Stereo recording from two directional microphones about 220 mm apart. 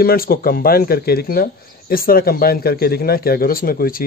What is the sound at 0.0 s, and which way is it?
Speech, 40° left (ahead or behind).